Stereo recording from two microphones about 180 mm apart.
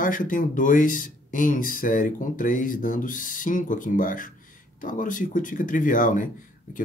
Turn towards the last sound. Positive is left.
turn(degrees=50)  # may be behind; listen again after turning